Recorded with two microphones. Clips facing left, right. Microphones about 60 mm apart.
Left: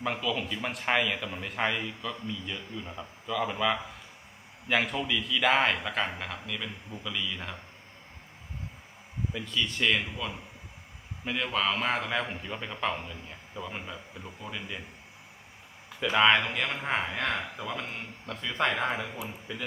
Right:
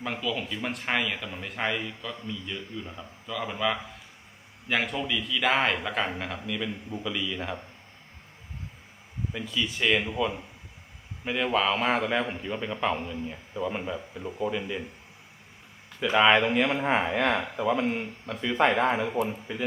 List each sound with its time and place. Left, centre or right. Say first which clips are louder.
0.0 s speech: even; centre
9.3 s speech: right 2 dB; centre
11.5 s speech: right 4 dB; centre
14.2 s speech: right 11 dB; right
16.0 s speech: right 2 dB; centre
19.5 s speech: right 5 dB; right